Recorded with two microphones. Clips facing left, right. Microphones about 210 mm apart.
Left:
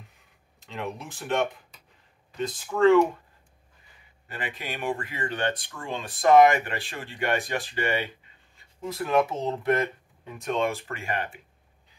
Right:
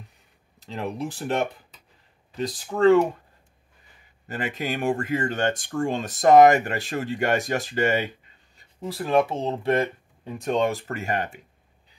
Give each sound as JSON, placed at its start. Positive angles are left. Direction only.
{"t": 0.6, "sound": "speech", "side_deg": -35}
{"t": 4.3, "sound": "speech", "side_deg": -45}
{"t": 8.5, "sound": "speech", "side_deg": -30}